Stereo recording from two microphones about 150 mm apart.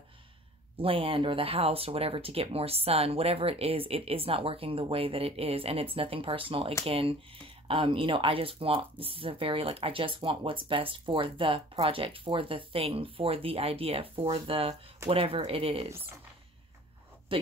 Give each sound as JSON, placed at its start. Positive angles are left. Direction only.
{"t": 0.7, "sound": "speech", "side_deg": -35}
{"t": 17.3, "sound": "speech", "side_deg": -35}